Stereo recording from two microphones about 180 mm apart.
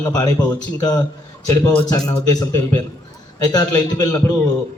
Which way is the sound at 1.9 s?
20° left (ahead or behind).